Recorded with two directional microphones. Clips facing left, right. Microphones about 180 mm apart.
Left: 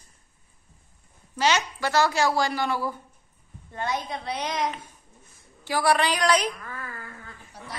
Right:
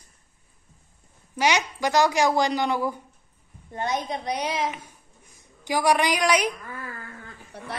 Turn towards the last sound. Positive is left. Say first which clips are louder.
# right 4 dB
turn(degrees=-60)  # may be behind; listen again after turning